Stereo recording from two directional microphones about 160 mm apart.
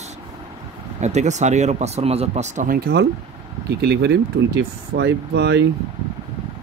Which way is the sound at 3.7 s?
90° right.